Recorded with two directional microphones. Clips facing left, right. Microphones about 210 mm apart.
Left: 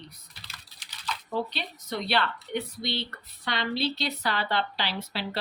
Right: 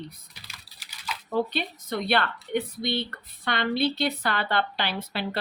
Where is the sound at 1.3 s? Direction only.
55° right (ahead or behind).